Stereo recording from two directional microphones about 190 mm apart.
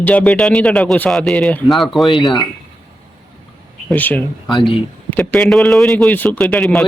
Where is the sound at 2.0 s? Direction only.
25° left (ahead or behind).